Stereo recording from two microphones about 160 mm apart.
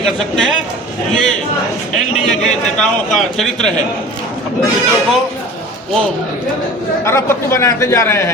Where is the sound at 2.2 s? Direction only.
5° left (ahead or behind).